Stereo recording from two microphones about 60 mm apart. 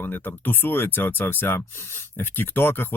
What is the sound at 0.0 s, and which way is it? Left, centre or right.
Speech, left.